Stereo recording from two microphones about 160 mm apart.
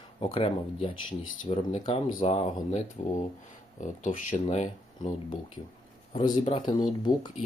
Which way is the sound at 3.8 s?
55° left (ahead or behind).